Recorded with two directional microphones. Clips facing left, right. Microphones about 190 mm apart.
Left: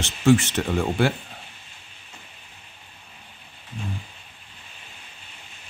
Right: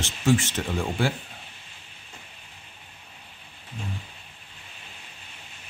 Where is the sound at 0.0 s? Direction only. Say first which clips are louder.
Left 5 dB; 65° left (ahead or behind).